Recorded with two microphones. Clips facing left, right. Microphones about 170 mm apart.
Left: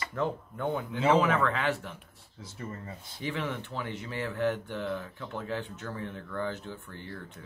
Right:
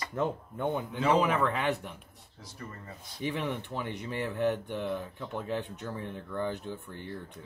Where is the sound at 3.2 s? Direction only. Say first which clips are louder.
Right 1 dB; 20° right (ahead or behind).